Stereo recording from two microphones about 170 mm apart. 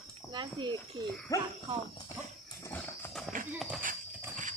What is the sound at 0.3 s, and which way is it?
Speech, 25° right (ahead or behind).